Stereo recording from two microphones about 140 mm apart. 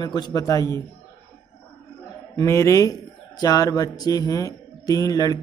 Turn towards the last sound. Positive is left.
turn(degrees=25)  # may be behind; listen again after turning